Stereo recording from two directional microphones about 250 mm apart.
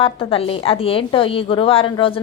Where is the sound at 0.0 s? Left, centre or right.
Left.